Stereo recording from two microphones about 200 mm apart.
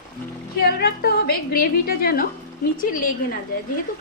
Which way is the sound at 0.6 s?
50° left (ahead or behind).